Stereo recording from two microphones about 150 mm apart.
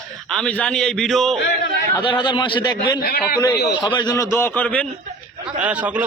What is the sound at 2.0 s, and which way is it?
Speech, 30° left (ahead or behind).